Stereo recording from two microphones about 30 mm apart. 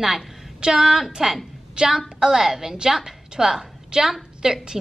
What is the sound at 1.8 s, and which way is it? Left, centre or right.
Speech, right.